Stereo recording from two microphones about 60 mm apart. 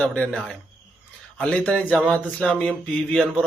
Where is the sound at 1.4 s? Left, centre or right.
Centre.